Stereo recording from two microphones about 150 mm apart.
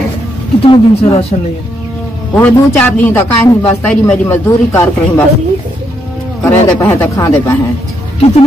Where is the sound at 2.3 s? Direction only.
10° left (ahead or behind).